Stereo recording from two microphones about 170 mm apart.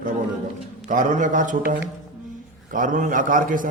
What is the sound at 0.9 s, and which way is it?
Speech, 50° right (ahead or behind).